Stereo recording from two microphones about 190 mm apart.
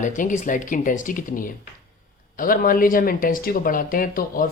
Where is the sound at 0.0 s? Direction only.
40° left (ahead or behind).